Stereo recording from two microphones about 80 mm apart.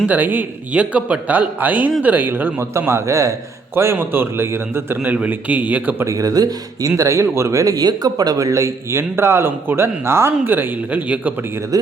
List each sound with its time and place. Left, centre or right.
0.0 s a man's voice: right
2.6 s speech: right
3.9 s speech: right
5.0 s a man's voice: centre
6.1 s speech: right
11.7 s speech: right